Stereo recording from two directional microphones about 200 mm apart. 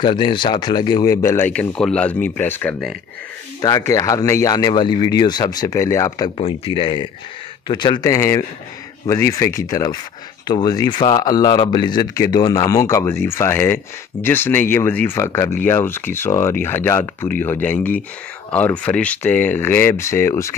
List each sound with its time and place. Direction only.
0.0 s speech: 25° left (ahead or behind)
6.3 s a man's voice: 30° left (ahead or behind)